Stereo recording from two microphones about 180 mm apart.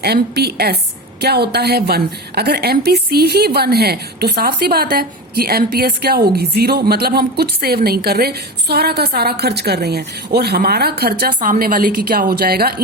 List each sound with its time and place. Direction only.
0.0 s a woman's voice: 65° right (ahead or behind)